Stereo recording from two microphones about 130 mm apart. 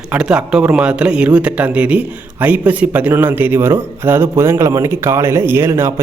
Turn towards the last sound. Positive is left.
turn(degrees=-20)  # may be behind; listen again after turning